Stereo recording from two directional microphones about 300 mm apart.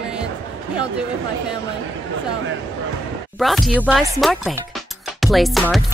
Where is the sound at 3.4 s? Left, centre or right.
Centre.